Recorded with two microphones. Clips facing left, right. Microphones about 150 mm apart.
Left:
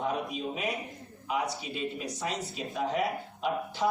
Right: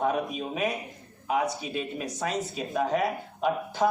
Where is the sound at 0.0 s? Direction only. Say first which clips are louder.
Right 4 dB; 50° right (ahead or behind).